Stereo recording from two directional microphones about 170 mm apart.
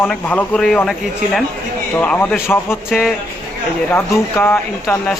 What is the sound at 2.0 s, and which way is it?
Speech, 10° left (ahead or behind).